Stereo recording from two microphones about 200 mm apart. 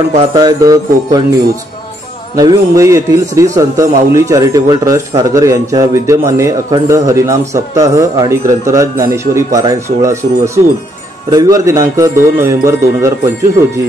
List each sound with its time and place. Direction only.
0.3 s jingle bell: 20° right (ahead or behind)
2.3 s a man's voice: 15° right (ahead or behind)